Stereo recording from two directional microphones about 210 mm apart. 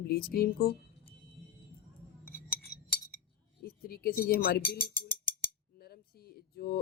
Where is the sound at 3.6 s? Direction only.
45° left (ahead or behind).